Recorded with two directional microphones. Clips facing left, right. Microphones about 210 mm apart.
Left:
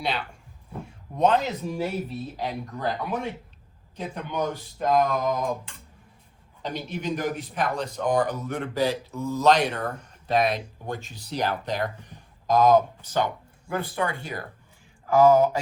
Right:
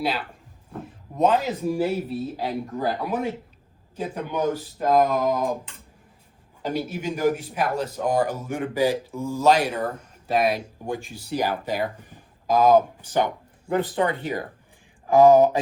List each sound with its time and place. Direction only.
0.0 s a man's voice: 5° right (ahead or behind)
6.6 s a man's voice: 5° right (ahead or behind)